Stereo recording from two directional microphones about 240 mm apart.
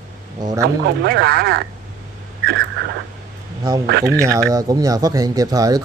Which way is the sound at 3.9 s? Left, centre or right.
Right.